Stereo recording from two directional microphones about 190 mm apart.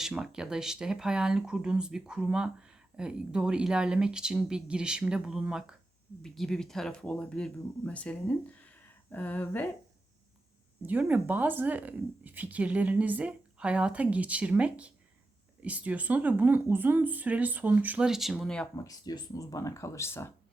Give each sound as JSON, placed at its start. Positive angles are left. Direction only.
{"t": 0.0, "sound": "speech", "side_deg": -5}
{"t": 10.8, "sound": "speech", "side_deg": -10}
{"t": 18.8, "sound": "speech", "side_deg": 20}